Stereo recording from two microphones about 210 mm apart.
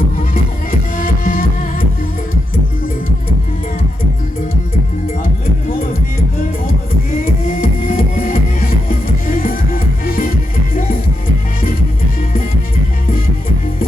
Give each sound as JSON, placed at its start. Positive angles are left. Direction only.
{"t": 0.7, "sound": "music", "side_deg": 40}
{"t": 7.6, "sound": "music", "side_deg": 40}